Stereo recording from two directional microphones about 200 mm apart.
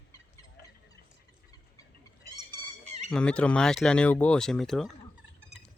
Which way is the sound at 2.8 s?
35° right (ahead or behind).